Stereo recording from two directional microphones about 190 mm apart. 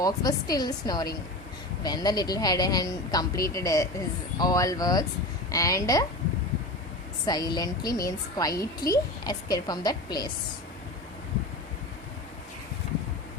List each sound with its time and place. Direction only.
0.0 s speech: 20° left (ahead or behind)
7.3 s speech: 20° left (ahead or behind)